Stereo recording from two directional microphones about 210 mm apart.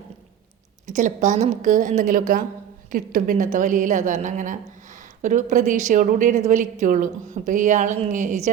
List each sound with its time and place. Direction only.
0.9 s a woman's voice: 35° right (ahead or behind)